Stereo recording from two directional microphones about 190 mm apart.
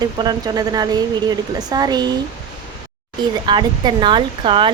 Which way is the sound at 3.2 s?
25° right (ahead or behind).